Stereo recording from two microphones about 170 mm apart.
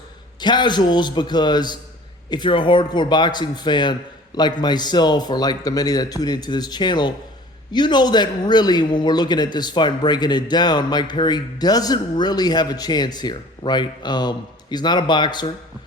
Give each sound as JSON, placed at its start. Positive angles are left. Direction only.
{"t": 0.3, "sound": "a man's voice", "side_deg": 25}